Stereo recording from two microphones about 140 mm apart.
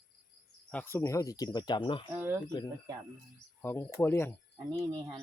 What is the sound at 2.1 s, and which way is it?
Speech, 15° right (ahead or behind).